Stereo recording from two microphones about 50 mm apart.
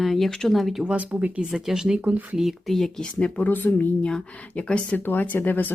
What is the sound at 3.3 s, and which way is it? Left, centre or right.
Speech, left.